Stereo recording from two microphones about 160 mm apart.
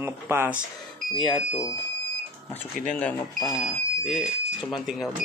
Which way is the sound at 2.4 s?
5° left (ahead or behind).